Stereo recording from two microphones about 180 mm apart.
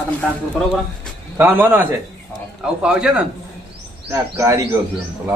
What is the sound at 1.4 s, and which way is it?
Speech, 10° right (ahead or behind).